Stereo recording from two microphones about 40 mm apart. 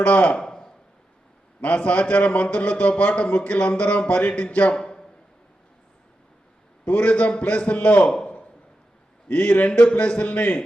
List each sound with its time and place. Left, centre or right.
0.0 s a man's voice: left
0.3 s a sound: centre
1.6 s a man's voice: left
4.7 s a sound: left
6.8 s a man's voice: left
9.3 s a man's voice: left